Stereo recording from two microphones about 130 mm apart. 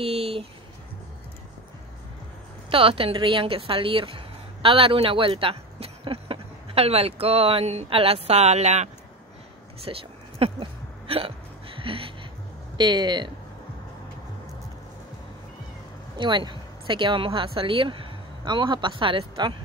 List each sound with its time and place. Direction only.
0.0 s a sound: 50° right (ahead or behind)
2.7 s a woman's voice: 45° right (ahead or behind)
9.9 s speech: 40° right (ahead or behind)
10.4 s hiccup: 45° right (ahead or behind)
12.7 s speech: 35° right (ahead or behind)
16.2 s speech: 35° right (ahead or behind)